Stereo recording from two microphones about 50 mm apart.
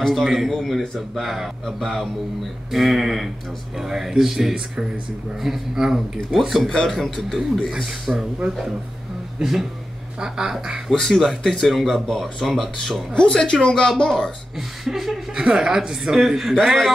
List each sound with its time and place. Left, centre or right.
0.0 s speech: centre
1.8 s speech: centre
2.7 s speech: centre
7.2 s speech: centre
9.4 s speech: centre
10.9 s speech: centre
13.1 s speech: centre
14.9 s speech: centre
15.3 s speech: centre